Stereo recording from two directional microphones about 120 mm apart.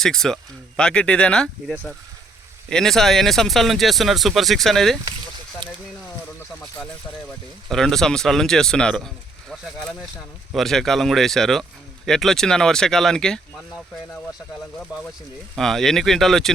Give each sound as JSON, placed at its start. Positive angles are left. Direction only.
{"t": 0.0, "sound": "speech", "side_deg": 5}
{"t": 7.7, "sound": "speech", "side_deg": 5}
{"t": 15.5, "sound": "speech", "side_deg": 5}